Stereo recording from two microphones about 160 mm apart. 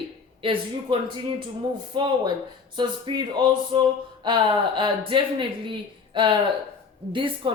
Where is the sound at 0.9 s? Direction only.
30° right (ahead or behind).